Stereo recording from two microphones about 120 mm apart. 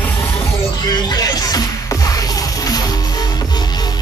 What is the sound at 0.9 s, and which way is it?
Music, 30° left (ahead or behind).